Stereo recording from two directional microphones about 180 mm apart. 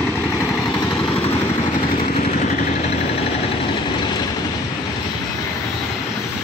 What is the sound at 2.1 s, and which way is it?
Vehicle, 45° left (ahead or behind).